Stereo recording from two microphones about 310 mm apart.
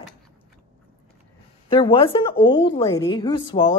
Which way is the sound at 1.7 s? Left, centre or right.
Centre.